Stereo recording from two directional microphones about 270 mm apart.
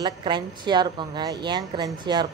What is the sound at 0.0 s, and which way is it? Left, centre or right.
Speech, centre.